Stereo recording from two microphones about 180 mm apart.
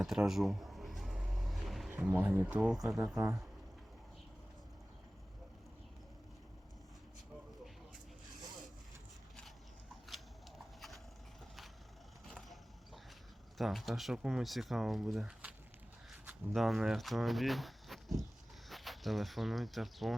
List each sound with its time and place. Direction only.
0.0 s a sound: centre (ahead or behind)
3.2 s speech: 15° right (ahead or behind)
10.8 s clip-clop: centre (ahead or behind)
12.2 s vehicle: centre (ahead or behind)
13.6 s speech: centre (ahead or behind)
16.6 s speech: centre (ahead or behind)